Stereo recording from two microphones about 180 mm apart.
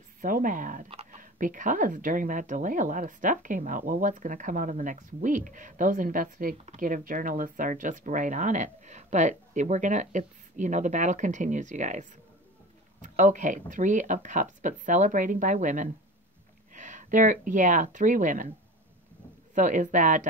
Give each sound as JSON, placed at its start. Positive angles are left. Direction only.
{"t": 0.2, "sound": "a woman's voice", "side_deg": -50}
{"t": 0.8, "sound": "a sound", "side_deg": -35}
{"t": 1.2, "sound": "a woman's voice", "side_deg": -50}
{"t": 19.5, "sound": "a woman's voice", "side_deg": -45}